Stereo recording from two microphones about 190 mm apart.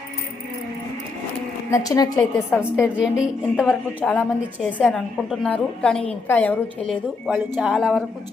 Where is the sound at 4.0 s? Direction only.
10° left (ahead or behind).